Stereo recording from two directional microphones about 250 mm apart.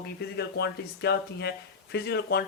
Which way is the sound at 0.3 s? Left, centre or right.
Left.